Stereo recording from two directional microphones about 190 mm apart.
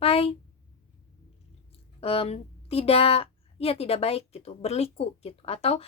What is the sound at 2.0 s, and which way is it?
A woman's voice, 30° left (ahead or behind).